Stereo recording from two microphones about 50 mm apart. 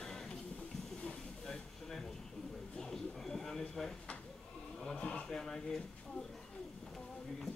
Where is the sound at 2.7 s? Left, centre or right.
Centre.